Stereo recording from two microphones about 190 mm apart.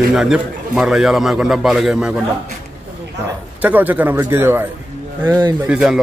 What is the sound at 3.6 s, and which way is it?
A man's voice, 10° right (ahead or behind).